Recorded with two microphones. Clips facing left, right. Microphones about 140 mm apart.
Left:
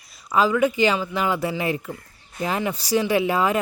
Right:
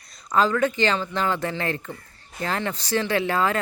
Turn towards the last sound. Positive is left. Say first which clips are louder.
# left 2 dB
turn(degrees=15)  # may be behind; listen again after turning